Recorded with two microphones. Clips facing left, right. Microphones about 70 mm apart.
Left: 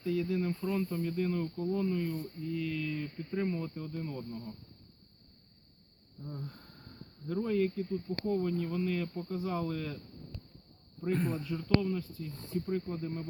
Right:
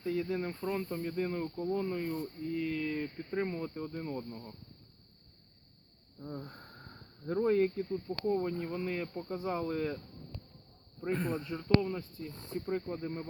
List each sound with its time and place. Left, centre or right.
0.0 s speech: right
4.2 s speech: centre
6.4 s speech: right
11.1 s speech: centre
11.3 s speech: right